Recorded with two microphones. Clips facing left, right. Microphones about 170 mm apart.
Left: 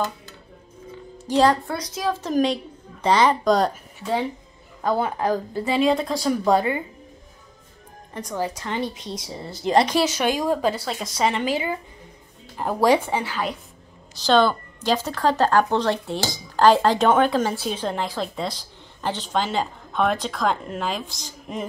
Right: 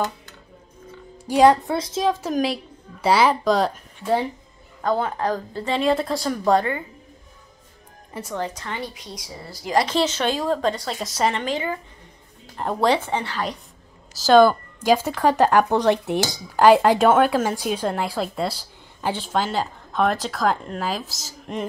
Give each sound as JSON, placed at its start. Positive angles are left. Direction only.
{"t": 1.1, "sound": "music", "side_deg": -15}
{"t": 1.5, "sound": "speech", "side_deg": -20}
{"t": 2.2, "sound": "a woman's voice", "side_deg": -5}
{"t": 4.8, "sound": "speech", "side_deg": 10}
{"t": 8.1, "sound": "speech", "side_deg": -5}
{"t": 8.4, "sound": "speech", "side_deg": 10}
{"t": 9.9, "sound": "a woman's voice", "side_deg": 10}
{"t": 14.1, "sound": "speech", "side_deg": -10}